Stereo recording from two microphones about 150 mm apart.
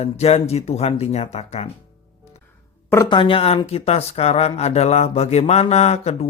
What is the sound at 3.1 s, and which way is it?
Speech, 35° left (ahead or behind).